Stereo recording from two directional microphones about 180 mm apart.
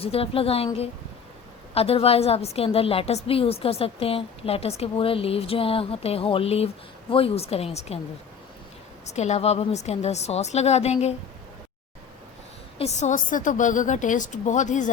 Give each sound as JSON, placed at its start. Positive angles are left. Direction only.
{"t": 0.0, "sound": "a woman's voice", "side_deg": 30}
{"t": 9.0, "sound": "a woman's voice", "side_deg": 40}
{"t": 12.8, "sound": "a woman's voice", "side_deg": 40}